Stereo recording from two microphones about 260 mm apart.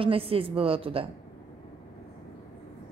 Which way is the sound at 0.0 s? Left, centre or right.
Right.